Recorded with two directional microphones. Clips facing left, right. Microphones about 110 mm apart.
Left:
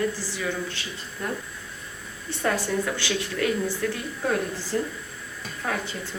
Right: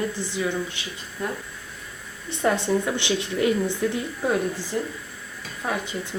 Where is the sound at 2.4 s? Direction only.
20° right (ahead or behind).